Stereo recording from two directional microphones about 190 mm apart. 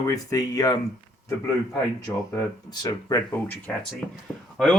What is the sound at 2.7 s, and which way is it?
Speech, 20° left (ahead or behind).